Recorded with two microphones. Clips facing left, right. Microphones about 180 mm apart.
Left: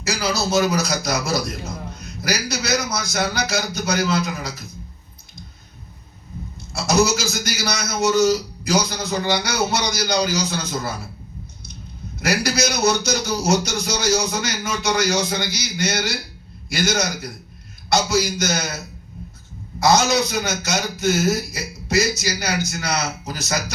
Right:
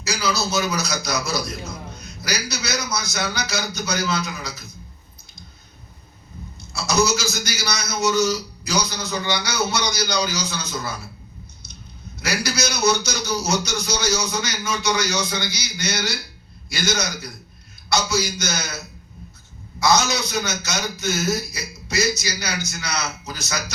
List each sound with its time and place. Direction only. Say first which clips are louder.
0.0 s a man's voice: left 2 dB; 50° left (ahead or behind)
6.7 s a man's voice: left 2 dB; 50° left (ahead or behind)
12.2 s a man's voice: left 4 dB; 50° left (ahead or behind)